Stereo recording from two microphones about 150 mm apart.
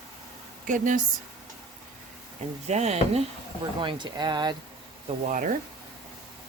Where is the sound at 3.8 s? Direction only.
30° right (ahead or behind).